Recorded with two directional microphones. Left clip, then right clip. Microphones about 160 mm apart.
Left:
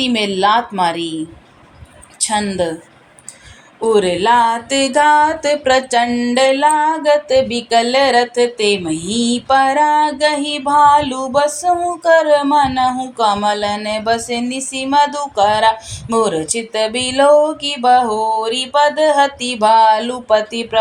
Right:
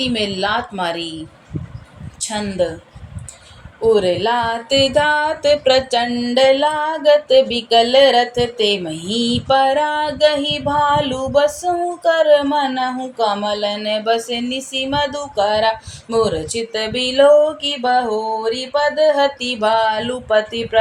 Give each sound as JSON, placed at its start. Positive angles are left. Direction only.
{"t": 0.0, "sound": "music", "side_deg": 30}
{"t": 2.2, "sound": "music", "side_deg": 25}
{"t": 3.8, "sound": "music", "side_deg": 30}
{"t": 5.5, "sound": "speech", "side_deg": 55}
{"t": 5.9, "sound": "music", "side_deg": 20}